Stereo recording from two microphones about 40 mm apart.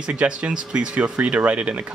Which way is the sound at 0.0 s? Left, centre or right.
Right.